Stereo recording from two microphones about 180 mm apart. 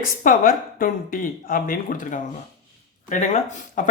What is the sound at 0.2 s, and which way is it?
Speech, 50° left (ahead or behind).